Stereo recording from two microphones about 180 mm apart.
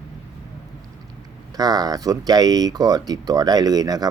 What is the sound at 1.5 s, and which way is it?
Speech, 20° right (ahead or behind).